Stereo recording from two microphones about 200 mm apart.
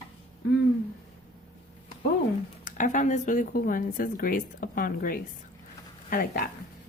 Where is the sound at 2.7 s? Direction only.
40° left (ahead or behind).